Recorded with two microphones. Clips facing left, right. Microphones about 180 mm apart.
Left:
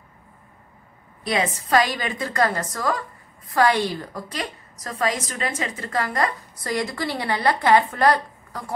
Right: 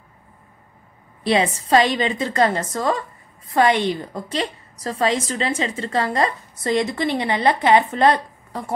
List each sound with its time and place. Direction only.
1.2 s a woman's voice: 30° right (ahead or behind)